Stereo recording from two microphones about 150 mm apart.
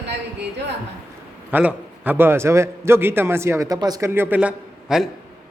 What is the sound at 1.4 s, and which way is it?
A man's voice, 10° right (ahead or behind).